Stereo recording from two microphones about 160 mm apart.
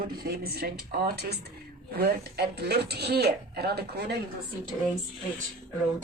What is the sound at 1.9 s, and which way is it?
Speech, 75° right (ahead or behind).